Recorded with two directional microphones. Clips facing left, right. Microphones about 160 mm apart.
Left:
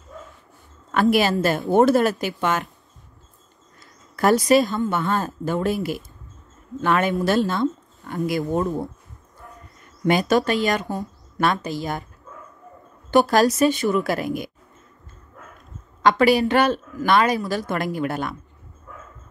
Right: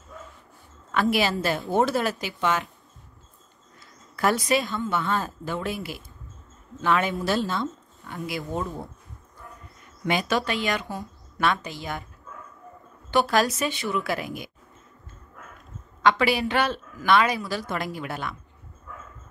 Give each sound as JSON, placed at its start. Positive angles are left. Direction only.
{"t": 0.9, "sound": "speech", "side_deg": 45}
{"t": 4.2, "sound": "speech", "side_deg": 40}
{"t": 10.0, "sound": "speech", "side_deg": 45}
{"t": 13.1, "sound": "speech", "side_deg": 45}
{"t": 16.0, "sound": "speech", "side_deg": 45}